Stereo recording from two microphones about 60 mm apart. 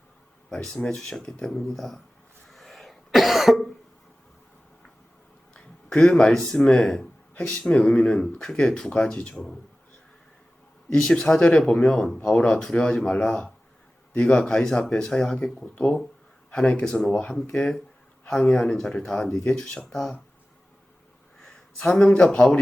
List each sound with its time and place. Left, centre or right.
0.7 s speech: centre
2.5 s cough: centre
5.5 s speech: centre
10.8 s speech: centre
21.8 s speech: centre